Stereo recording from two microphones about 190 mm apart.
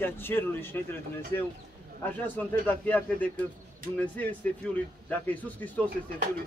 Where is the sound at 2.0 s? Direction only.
10° left (ahead or behind).